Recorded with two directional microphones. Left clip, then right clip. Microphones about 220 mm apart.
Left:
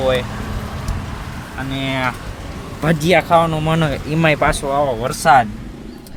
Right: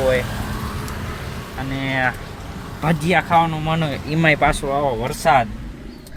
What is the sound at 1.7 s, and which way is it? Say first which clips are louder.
Speech: even; 10° left (ahead or behind).